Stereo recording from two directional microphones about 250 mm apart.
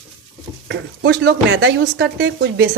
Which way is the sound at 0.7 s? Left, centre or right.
Right.